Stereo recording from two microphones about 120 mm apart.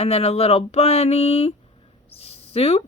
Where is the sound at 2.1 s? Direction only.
55° left (ahead or behind).